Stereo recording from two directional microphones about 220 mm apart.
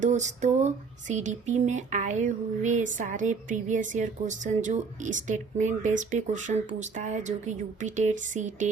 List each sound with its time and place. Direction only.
0.0 s speech: 30° right (ahead or behind)